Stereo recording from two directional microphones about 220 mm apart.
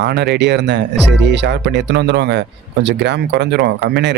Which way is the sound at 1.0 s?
Centre (ahead or behind).